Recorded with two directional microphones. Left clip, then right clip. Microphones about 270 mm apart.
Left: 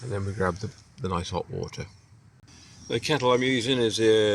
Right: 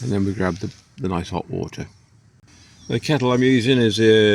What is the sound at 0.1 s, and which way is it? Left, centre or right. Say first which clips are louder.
Speech: right 5 dB; right.